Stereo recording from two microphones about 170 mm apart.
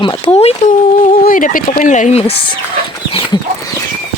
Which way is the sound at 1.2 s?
50° left (ahead or behind).